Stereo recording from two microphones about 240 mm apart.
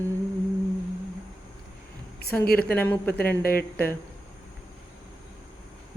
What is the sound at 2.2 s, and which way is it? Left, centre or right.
Speech, left.